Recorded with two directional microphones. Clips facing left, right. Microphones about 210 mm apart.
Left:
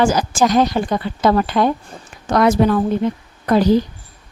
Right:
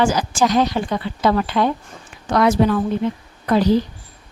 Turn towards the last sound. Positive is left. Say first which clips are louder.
# left 2 dB
turn(degrees=45)  # may be behind; listen again after turning